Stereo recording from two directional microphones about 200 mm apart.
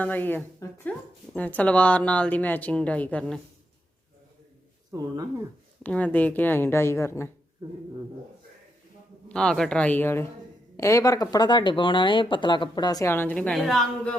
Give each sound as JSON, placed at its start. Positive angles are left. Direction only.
{"t": 0.0, "sound": "a woman's voice", "side_deg": 10}
{"t": 4.9, "sound": "speech", "side_deg": -20}
{"t": 5.8, "sound": "a woman's voice", "side_deg": 10}
{"t": 9.3, "sound": "a woman's voice", "side_deg": 5}